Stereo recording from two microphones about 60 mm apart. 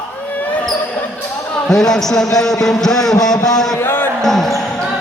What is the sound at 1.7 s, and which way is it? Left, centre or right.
Speech, centre.